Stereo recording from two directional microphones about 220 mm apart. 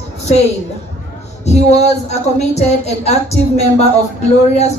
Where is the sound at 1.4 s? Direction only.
30° left (ahead or behind).